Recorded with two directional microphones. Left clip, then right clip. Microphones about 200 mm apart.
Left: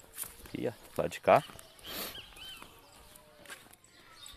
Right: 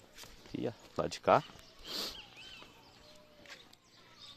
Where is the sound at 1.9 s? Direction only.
15° right (ahead or behind).